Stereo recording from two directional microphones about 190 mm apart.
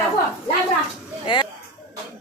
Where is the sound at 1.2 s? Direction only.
25° left (ahead or behind).